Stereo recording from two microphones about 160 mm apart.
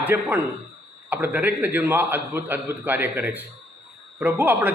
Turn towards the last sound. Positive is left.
turn(degrees=-10)  # may be behind; listen again after turning